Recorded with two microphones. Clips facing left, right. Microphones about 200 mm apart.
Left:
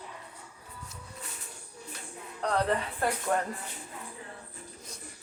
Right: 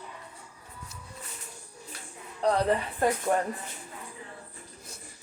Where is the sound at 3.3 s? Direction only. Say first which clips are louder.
Even; 20° right (ahead or behind).